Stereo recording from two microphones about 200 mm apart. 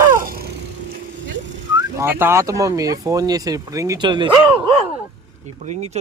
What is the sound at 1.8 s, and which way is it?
Speech, 15° right (ahead or behind).